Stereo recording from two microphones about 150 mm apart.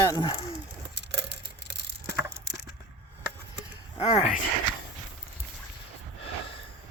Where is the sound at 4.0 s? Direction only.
40° left (ahead or behind).